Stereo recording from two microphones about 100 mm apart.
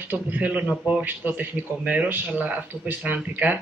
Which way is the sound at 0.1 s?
20° right (ahead or behind).